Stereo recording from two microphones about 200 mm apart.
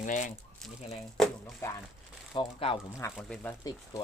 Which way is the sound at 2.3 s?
25° left (ahead or behind).